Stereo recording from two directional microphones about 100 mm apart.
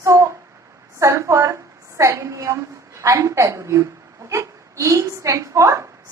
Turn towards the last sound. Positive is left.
turn(degrees=-30)  # may be behind; listen again after turning